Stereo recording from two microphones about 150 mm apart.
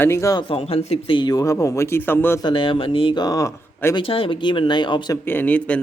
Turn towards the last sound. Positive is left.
turn(degrees=10)  # may be behind; listen again after turning